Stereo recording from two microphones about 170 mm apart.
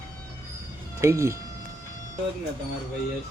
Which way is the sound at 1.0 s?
15° right (ahead or behind).